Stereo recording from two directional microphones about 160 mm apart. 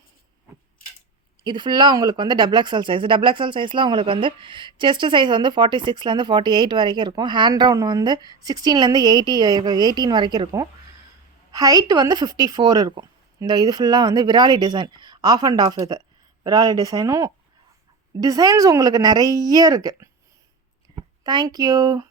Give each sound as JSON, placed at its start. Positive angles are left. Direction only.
{"t": 1.5, "sound": "speech", "side_deg": -30}
{"t": 21.2, "sound": "speech", "side_deg": -25}